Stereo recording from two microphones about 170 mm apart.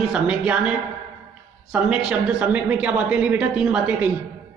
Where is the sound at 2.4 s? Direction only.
10° right (ahead or behind).